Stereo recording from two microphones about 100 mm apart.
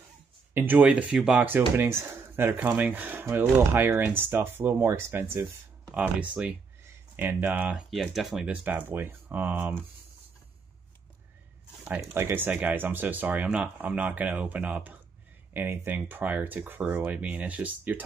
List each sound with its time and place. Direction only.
0.6 s speech: 15° right (ahead or behind)
1.8 s speech: 25° right (ahead or behind)
7.7 s speech: centre (ahead or behind)
8.5 s speech: 15° right (ahead or behind)
12.0 s speech: 25° right (ahead or behind)